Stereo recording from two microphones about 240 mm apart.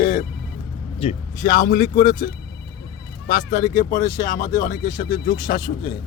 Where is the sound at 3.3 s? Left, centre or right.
Left.